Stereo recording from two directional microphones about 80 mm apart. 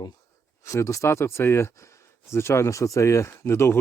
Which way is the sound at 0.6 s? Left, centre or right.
Left.